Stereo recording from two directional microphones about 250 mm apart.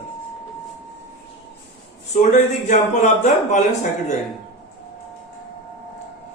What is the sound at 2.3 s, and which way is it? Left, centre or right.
Speech, left.